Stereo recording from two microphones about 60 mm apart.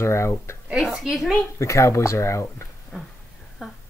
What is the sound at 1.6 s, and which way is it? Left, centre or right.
Speech, left.